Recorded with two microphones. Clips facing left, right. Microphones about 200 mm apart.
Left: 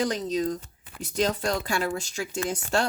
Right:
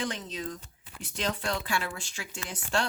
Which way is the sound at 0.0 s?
40° left (ahead or behind).